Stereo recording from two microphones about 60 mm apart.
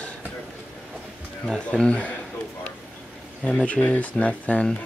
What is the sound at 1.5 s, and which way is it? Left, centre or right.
Speech, centre.